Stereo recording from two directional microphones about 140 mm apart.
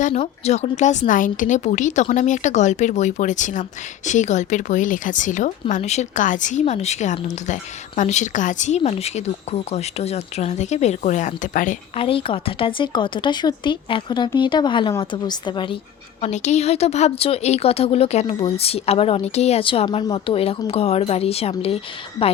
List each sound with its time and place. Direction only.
0.1 s speech: 50° left (ahead or behind)
8.8 s speech: 50° left (ahead or behind); by 11.8 s 65° left (ahead or behind)
11.9 s speech: 40° left (ahead or behind)
16.2 s speech: 55° left (ahead or behind)